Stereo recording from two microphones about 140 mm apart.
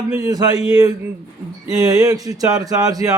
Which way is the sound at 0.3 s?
30° right (ahead or behind).